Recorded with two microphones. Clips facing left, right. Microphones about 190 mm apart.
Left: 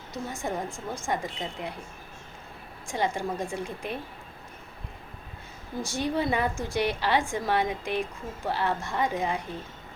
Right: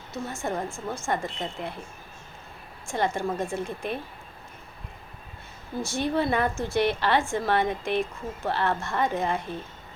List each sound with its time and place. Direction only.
0.1 s a woman's voice: 15° left (ahead or behind)
2.8 s a woman's voice: 15° left (ahead or behind)
5.8 s a woman's voice: 15° left (ahead or behind)